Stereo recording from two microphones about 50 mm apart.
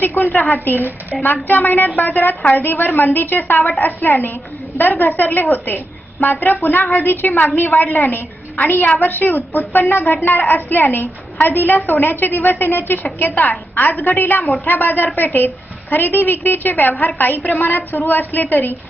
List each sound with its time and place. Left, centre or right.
0.0 s a woman's voice: left
0.8 s a woman's voice: right
1.2 s a woman's voice: left